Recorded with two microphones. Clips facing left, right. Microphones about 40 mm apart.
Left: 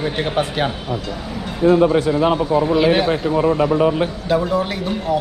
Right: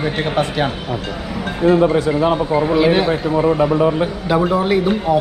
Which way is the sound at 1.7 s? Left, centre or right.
Right.